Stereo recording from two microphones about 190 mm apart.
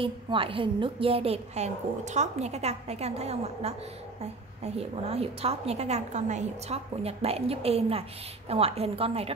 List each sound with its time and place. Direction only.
0.0 s a woman's voice: 30° right (ahead or behind)
4.7 s a woman's voice: 30° right (ahead or behind)